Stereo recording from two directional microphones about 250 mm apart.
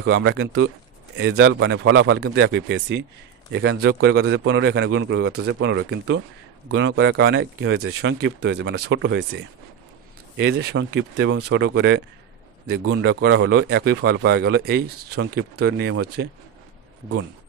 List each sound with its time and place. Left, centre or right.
0.0 s a man's voice: right
11.3 s speech: right
11.6 s a man's voice: right